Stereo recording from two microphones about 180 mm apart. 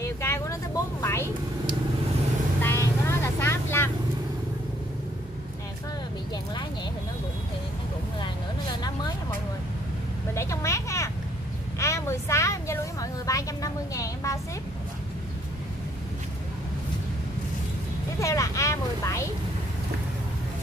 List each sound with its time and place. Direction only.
0.0 s vehicle: 15° left (ahead or behind)
2.6 s vehicle: 15° left (ahead or behind)
10.3 s vehicle: 15° left (ahead or behind)
18.2 s vehicle: 15° left (ahead or behind)